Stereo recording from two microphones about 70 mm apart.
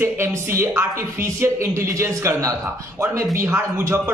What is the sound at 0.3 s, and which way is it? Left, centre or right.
A man's voice, right.